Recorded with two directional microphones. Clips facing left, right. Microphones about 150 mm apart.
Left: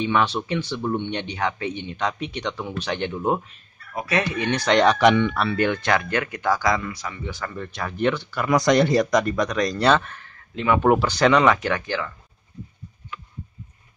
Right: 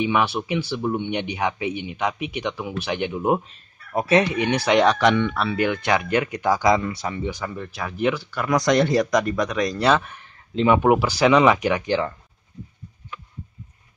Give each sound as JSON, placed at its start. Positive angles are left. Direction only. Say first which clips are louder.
{"t": 0.0, "sound": "speech", "louder": "even", "side_deg": -10}
{"t": 5.0, "sound": "speech", "louder": "left 2 dB", "side_deg": 10}
{"t": 7.2, "sound": "speech", "louder": "right 2 dB", "side_deg": -15}
{"t": 10.5, "sound": "speech", "louder": "right 4 dB", "side_deg": -25}
{"t": 10.8, "sound": "speech", "louder": "even", "side_deg": -10}